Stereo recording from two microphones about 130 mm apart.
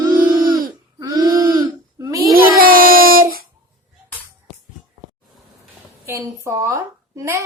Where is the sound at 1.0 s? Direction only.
30° right (ahead or behind).